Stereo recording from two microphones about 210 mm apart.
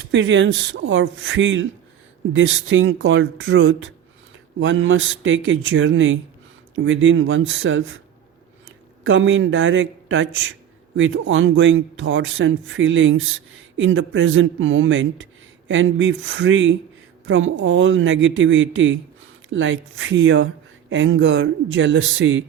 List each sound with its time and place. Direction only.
0.1 s a man's voice: 60° right (ahead or behind)
9.0 s a man's voice: 65° right (ahead or behind)